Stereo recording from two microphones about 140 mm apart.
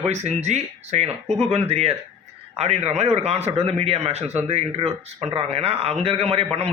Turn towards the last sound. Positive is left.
turn(degrees=-45)  # may be behind; listen again after turning